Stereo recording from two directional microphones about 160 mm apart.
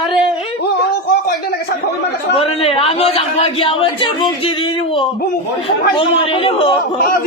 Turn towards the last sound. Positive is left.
turn(degrees=35)  # may be behind; listen again after turning